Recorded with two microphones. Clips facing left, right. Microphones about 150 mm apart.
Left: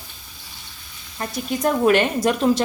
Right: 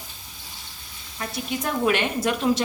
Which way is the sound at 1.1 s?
40° left (ahead or behind).